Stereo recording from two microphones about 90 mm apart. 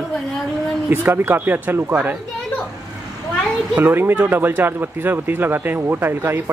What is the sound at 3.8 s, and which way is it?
Speech, 25° right (ahead or behind).